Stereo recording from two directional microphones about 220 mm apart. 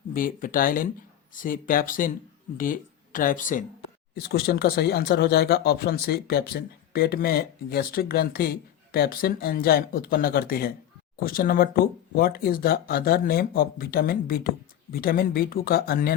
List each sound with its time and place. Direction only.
0.1 s speech: 40° left (ahead or behind)